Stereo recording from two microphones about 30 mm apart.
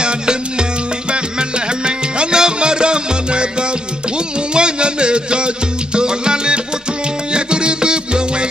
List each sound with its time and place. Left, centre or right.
1.9 s music: right
4.6 s a sound: right
5.9 s music: right